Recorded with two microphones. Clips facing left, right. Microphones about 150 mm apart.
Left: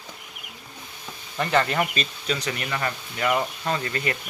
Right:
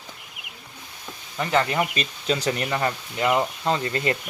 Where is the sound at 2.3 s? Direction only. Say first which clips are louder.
Right 6 dB; 30° right (ahead or behind).